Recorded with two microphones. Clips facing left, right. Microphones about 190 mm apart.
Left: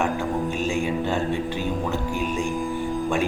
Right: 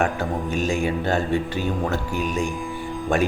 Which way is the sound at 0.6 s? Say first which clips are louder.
Right 1 dB; 85° right.